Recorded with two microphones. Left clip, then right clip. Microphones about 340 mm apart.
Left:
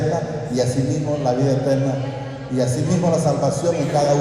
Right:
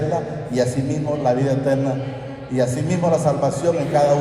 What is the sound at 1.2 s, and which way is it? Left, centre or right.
Speech, centre.